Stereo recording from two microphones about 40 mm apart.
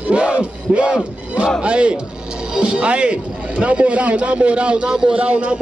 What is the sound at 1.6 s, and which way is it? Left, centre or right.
A man's voice, right.